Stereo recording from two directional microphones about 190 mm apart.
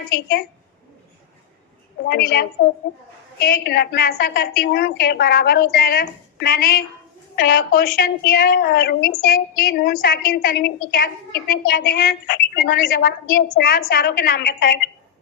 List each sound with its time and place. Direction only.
0.1 s a woman's voice: 60° left (ahead or behind)
2.0 s a woman's voice: 60° left (ahead or behind)